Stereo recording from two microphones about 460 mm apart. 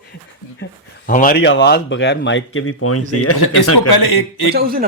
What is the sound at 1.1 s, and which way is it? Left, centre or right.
Speech, centre.